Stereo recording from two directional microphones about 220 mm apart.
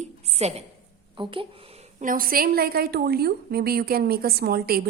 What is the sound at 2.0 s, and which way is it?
A woman's voice, 40° right (ahead or behind).